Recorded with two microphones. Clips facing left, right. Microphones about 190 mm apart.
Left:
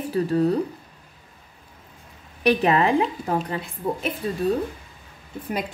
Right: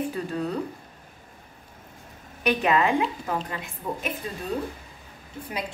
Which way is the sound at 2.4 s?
35° left (ahead or behind).